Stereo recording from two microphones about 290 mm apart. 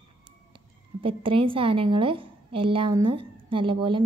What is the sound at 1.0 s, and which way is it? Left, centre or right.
A woman's voice, centre.